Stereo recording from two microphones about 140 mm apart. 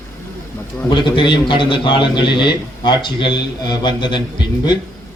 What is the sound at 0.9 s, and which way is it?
A man's voice, 35° left (ahead or behind).